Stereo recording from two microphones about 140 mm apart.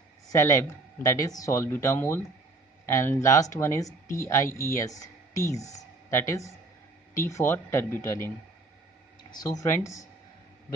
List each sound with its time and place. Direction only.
0.3 s speech: 20° left (ahead or behind)
9.3 s speech: 25° left (ahead or behind)